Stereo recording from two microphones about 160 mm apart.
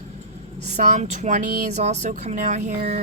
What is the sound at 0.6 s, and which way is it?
Speech, 45° right (ahead or behind).